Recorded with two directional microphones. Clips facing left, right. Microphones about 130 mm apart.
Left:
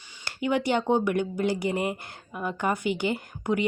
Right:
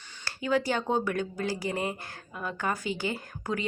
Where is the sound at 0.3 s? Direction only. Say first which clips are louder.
Left 2 dB; 20° left (ahead or behind).